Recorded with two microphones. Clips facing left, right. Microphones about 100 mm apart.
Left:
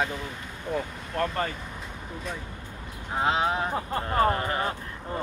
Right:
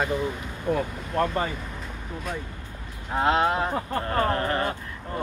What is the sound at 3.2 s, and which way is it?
Speech, centre (ahead or behind).